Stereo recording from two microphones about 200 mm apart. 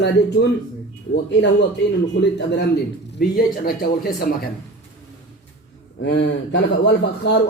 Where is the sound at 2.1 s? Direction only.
60° left (ahead or behind).